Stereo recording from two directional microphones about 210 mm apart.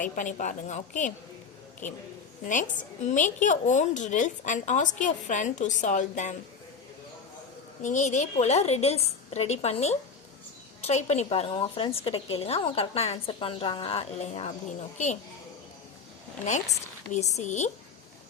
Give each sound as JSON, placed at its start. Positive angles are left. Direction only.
{"t": 0.0, "sound": "a woman's voice", "side_deg": 40}
{"t": 2.5, "sound": "a woman's voice", "side_deg": 35}
{"t": 7.8, "sound": "a woman's voice", "side_deg": 35}
{"t": 17.1, "sound": "a woman's voice", "side_deg": 35}